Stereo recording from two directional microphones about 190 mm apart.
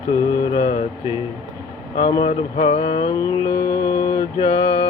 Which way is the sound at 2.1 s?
30° left (ahead or behind).